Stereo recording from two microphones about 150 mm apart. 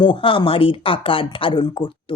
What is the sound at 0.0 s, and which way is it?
Speech, 35° left (ahead or behind).